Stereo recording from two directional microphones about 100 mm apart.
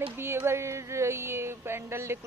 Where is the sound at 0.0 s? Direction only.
20° right (ahead or behind).